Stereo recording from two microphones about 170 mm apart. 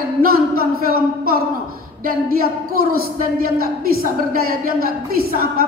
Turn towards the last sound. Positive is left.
turn(degrees=-60)  # may be behind; listen again after turning